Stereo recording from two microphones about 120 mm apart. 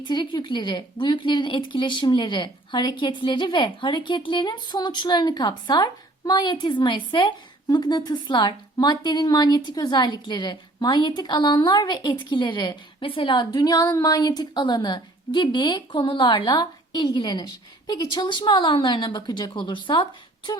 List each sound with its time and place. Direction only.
0.0 s speech: 40° left (ahead or behind)